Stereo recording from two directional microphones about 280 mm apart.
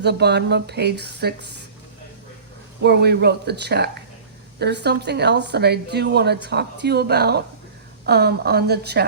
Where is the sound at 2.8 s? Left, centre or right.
Right.